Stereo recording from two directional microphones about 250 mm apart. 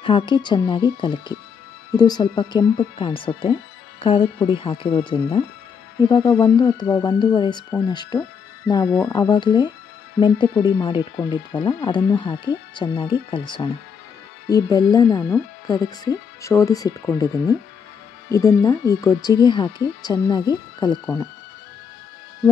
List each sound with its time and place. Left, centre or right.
0.0 s speech: centre
18.3 s speech: centre